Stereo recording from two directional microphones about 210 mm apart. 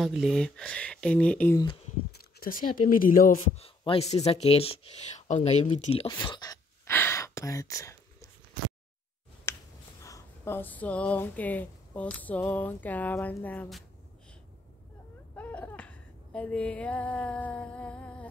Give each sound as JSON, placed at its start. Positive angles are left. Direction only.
{"t": 0.0, "sound": "speech", "side_deg": 0}
{"t": 2.9, "sound": "a man's voice", "side_deg": 40}
{"t": 6.1, "sound": "gasp", "side_deg": 20}
{"t": 10.0, "sound": "speech", "side_deg": 15}
{"t": 15.3, "sound": "a sound", "side_deg": 10}